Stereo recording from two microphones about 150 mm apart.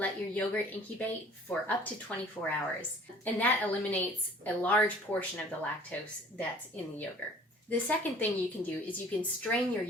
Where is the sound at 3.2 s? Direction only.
10° left (ahead or behind).